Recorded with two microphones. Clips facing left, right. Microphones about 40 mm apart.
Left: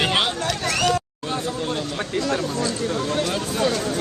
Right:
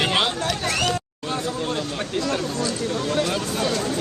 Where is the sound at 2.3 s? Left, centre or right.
Left.